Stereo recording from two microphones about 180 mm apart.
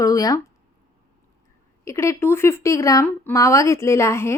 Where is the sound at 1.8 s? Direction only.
15° left (ahead or behind).